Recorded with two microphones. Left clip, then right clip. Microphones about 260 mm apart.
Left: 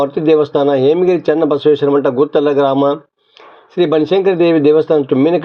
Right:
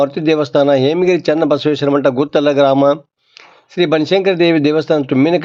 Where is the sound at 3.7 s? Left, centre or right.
Right.